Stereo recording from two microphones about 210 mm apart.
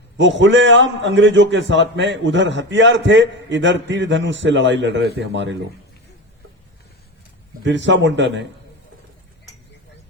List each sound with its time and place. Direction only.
0.2 s a man's voice: 60° right (ahead or behind)
7.6 s a man's voice: 60° right (ahead or behind)